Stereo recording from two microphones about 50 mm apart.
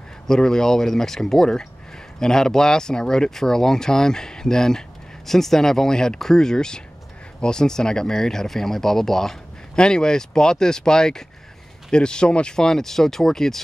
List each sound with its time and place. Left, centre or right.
0.3 s speech: centre